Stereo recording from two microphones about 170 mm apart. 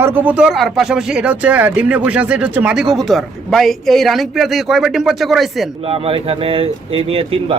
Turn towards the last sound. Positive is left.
turn(degrees=-35)  # may be behind; listen again after turning